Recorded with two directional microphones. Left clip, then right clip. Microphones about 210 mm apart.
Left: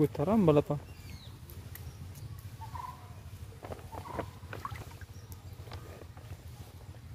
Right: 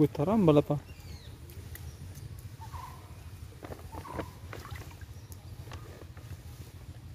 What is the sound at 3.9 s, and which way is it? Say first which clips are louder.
Rodents: even; 5° right (ahead or behind).